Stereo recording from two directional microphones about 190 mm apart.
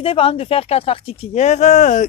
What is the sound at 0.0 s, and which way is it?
Speech, 30° left (ahead or behind).